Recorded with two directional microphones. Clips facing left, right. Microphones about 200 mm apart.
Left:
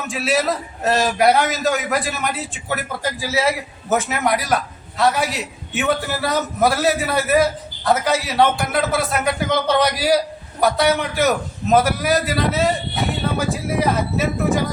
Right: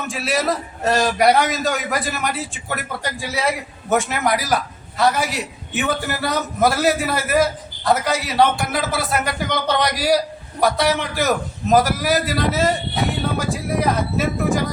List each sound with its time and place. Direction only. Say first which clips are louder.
0.1 s a man's voice: left 2 dB; centre (ahead or behind)